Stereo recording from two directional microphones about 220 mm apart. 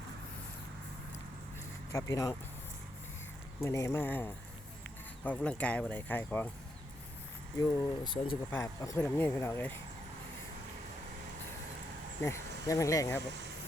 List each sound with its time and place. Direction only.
1.9 s speech: 15° left (ahead or behind)
3.6 s speech: 15° left (ahead or behind)
7.6 s speech: 20° left (ahead or behind)
12.2 s speech: 15° left (ahead or behind)